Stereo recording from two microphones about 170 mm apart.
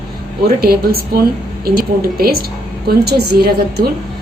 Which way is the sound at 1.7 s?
65° right (ahead or behind).